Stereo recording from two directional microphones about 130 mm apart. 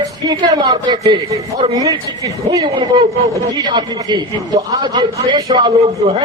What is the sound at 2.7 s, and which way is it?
A man's voice, 40° right (ahead or behind).